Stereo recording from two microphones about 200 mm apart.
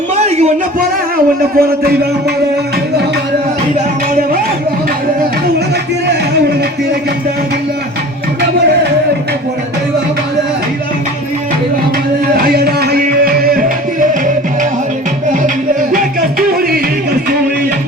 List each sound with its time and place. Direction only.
0.3 s music: 35° right (ahead or behind)
1.5 s a man's voice: 50° right (ahead or behind)
12.3 s music: 50° right (ahead or behind)